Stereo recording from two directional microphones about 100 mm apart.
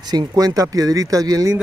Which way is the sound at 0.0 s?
45° right (ahead or behind).